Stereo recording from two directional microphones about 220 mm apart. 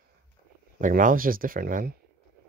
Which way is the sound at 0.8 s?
40° right (ahead or behind).